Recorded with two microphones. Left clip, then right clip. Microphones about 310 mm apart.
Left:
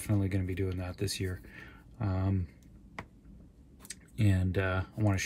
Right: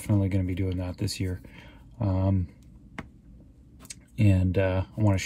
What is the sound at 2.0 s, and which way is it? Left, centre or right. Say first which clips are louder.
Speech: right 7 dB; left.